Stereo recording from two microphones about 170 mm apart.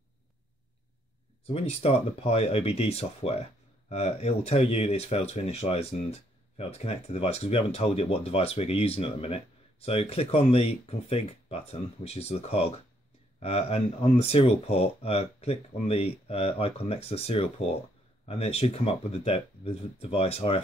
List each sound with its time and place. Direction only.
1.5 s speech: 35° left (ahead or behind)